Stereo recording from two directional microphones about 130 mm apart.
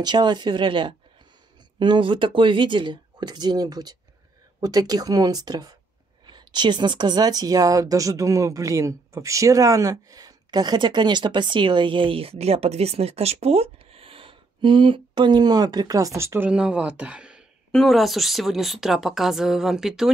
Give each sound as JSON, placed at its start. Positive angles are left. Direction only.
{"t": 0.0, "sound": "speech", "side_deg": -35}
{"t": 16.4, "sound": "speech", "side_deg": -5}